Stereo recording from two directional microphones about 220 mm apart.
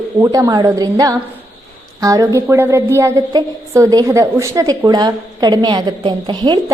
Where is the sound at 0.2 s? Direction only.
15° right (ahead or behind).